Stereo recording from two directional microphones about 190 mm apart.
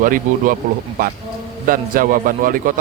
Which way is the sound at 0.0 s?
45° right (ahead or behind).